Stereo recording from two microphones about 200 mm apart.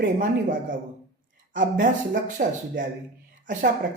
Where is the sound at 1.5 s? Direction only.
45° right (ahead or behind).